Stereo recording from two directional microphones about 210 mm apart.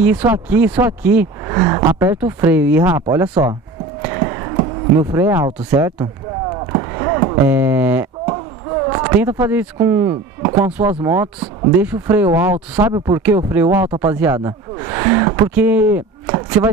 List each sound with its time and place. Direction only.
0.0 s speech: 10° right (ahead or behind)
1.6 s speech: 20° right (ahead or behind)
4.0 s a sound: 15° right (ahead or behind)
7.4 s speech: 10° right (ahead or behind)